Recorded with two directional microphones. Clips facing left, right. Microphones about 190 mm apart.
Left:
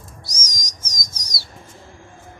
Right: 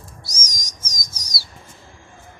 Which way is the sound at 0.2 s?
10° right (ahead or behind).